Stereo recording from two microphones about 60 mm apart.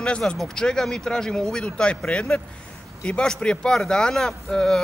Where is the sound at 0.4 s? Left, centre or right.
Centre.